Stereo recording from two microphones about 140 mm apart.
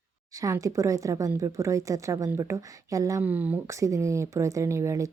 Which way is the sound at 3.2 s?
10° right (ahead or behind).